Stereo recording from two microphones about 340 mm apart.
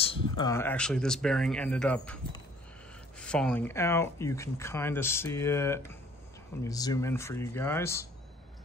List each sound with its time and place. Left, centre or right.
0.0 s speech: centre
3.2 s speech: centre